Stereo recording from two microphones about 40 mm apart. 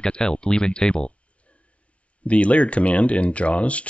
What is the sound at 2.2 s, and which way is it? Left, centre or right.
Speech, left.